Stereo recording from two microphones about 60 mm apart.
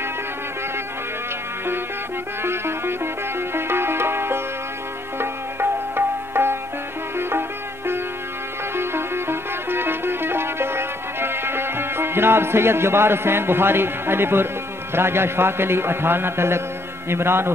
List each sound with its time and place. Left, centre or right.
2.4 s music: right
17.1 s a man's voice: right